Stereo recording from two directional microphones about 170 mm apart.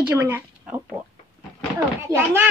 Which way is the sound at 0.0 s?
10° right (ahead or behind).